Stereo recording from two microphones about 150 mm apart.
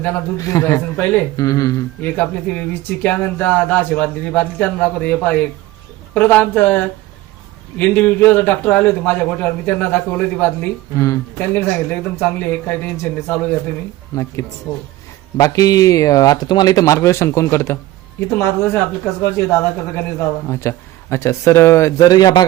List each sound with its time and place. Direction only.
0.0 s speech: 20° left (ahead or behind)
2.0 s a man's voice: 10° left (ahead or behind)
15.4 s a man's voice: 25° left (ahead or behind)